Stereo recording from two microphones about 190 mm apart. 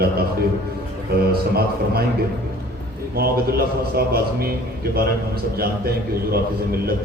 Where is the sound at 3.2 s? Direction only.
55° right (ahead or behind).